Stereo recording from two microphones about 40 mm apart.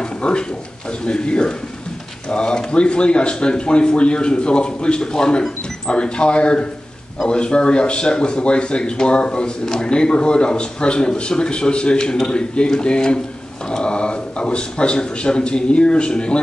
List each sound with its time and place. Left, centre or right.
0.0 s speech: left